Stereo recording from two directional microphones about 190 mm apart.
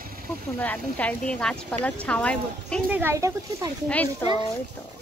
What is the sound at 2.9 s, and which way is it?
Speech, 15° right (ahead or behind).